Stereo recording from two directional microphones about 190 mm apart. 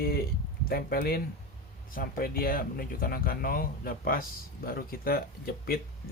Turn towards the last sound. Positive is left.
turn(degrees=55)  # may be behind; listen again after turning